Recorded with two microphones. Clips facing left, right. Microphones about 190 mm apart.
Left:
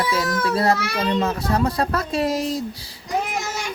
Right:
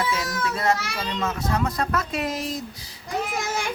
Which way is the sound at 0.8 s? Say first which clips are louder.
Left 7 dB; 60° left (ahead or behind).